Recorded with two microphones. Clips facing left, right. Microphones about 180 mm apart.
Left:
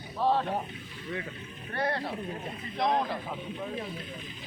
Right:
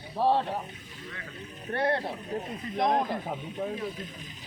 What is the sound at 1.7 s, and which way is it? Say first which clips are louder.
Speech: right 3 dB; 40° right (ahead or behind).